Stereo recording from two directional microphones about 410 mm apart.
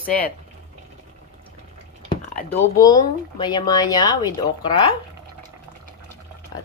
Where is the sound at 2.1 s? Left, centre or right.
Centre.